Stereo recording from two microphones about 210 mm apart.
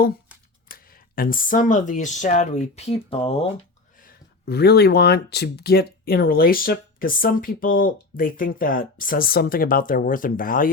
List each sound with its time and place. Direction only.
0.7 s speech: 45° left (ahead or behind); by 3.5 s 25° left (ahead or behind)
4.0 s speech: 50° left (ahead or behind)